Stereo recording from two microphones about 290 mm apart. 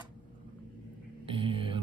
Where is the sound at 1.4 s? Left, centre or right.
Centre.